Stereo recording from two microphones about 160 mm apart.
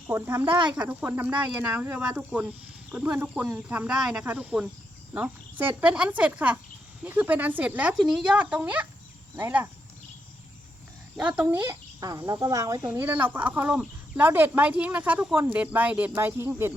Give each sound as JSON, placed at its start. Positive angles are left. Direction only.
{"t": 0.1, "sound": "speech", "side_deg": -15}
{"t": 11.2, "sound": "speech", "side_deg": -10}